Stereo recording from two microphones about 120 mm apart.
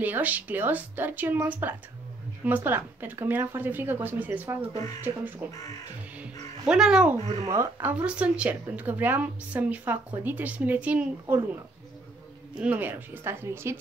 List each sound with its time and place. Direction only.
0.0 s a woman's voice: 15° right (ahead or behind)
6.6 s a woman's voice: 5° right (ahead or behind)
7.4 s speech: 30° right (ahead or behind)
7.9 s a woman's voice: 10° right (ahead or behind)
12.5 s speech: 10° right (ahead or behind)